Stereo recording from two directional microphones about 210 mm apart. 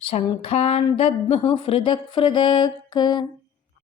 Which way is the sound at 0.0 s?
25° left (ahead or behind).